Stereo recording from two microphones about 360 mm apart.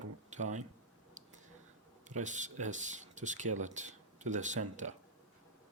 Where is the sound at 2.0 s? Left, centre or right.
Centre.